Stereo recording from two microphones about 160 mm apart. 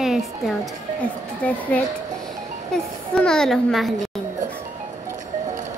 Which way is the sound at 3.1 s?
5° left (ahead or behind).